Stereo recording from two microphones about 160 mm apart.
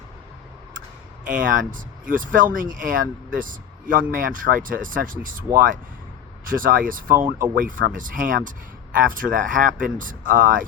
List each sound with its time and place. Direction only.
1.2 s a man's voice: 55° right (ahead or behind)